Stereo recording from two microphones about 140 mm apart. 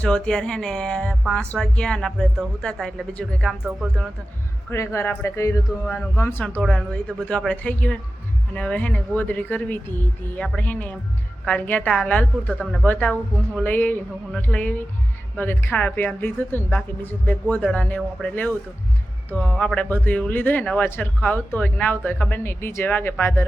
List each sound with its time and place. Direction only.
0.0 s speech: 5° left (ahead or behind)
3.6 s speech: 5° right (ahead or behind)
4.7 s speech: 20° left (ahead or behind)
6.6 s speech: 5° left (ahead or behind)